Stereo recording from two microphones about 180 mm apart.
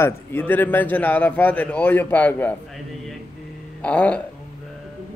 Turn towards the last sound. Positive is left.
turn(degrees=5)  # may be behind; listen again after turning